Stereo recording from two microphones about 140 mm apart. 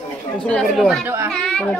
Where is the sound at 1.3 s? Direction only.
5° left (ahead or behind).